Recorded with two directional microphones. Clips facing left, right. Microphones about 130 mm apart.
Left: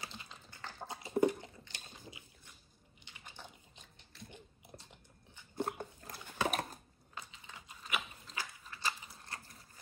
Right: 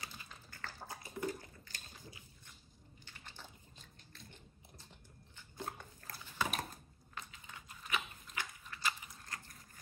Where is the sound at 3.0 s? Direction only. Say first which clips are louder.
Left 2 dB; 15° left (ahead or behind).